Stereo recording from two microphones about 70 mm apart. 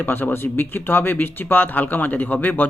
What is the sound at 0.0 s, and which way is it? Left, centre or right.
Speech, left.